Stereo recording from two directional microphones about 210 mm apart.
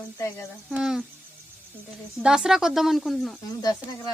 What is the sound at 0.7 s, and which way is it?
Speech, 5° right (ahead or behind).